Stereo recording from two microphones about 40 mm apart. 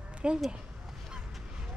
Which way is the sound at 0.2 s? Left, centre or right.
Right.